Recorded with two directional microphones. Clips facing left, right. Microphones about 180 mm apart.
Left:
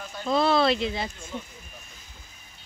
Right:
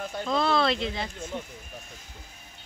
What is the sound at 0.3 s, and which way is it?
Speech, 5° left (ahead or behind).